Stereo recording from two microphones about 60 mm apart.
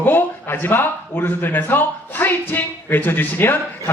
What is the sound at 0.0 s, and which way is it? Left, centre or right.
Speech, left.